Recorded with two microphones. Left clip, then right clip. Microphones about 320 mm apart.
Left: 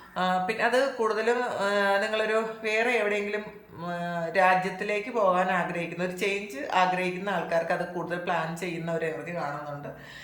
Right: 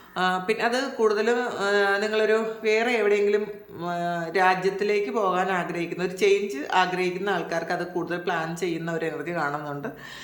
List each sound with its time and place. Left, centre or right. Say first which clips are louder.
0.2 s speech: right 2 dB; centre